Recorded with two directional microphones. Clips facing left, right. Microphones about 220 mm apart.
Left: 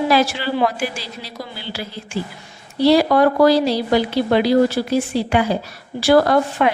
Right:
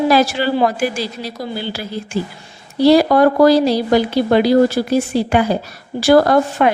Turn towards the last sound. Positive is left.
turn(degrees=-45)  # may be behind; listen again after turning